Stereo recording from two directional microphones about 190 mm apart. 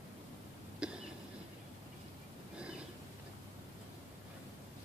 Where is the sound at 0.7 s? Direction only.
5° right (ahead or behind).